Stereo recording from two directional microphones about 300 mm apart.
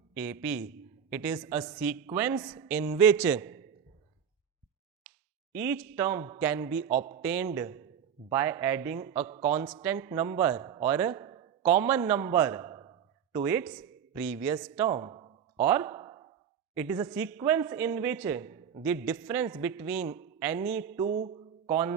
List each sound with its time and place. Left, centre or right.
0.1 s a man's voice: centre
5.5 s a man's voice: centre
6.8 s a man's voice: right
7.2 s a man's voice: centre
9.1 s a man's voice: right
9.5 s a man's voice: centre
20.9 s a man's voice: centre
21.7 s a man's voice: centre